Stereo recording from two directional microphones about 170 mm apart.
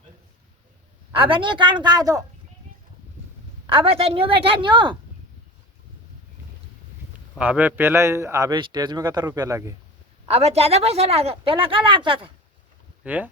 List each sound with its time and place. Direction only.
1.1 s a woman's voice: 30° right (ahead or behind)
3.7 s speech: 35° right (ahead or behind)
7.3 s a man's voice: 5° right (ahead or behind)
10.2 s speech: 35° right (ahead or behind)
13.1 s a man's voice: 10° right (ahead or behind)